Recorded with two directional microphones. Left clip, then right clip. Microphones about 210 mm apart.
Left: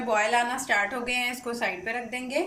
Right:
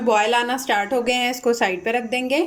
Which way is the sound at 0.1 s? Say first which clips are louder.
Right 6 dB; 45° right (ahead or behind).